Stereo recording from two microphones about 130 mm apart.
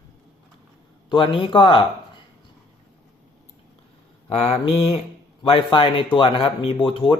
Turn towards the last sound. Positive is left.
turn(degrees=40)  # may be behind; listen again after turning